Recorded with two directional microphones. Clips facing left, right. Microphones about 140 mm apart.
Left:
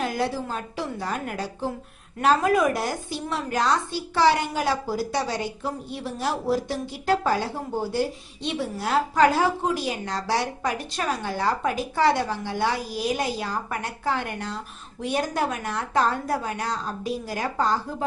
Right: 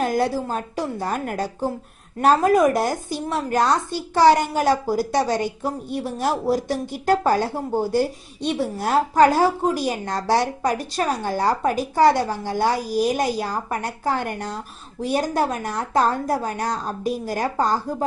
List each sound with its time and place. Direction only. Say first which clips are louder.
0.0 s a woman's voice: right 5 dB; 45° right (ahead or behind)